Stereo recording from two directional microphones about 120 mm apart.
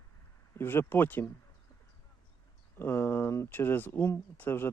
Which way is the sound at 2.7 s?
20° left (ahead or behind).